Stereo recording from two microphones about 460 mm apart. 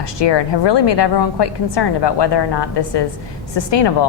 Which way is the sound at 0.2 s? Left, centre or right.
Left.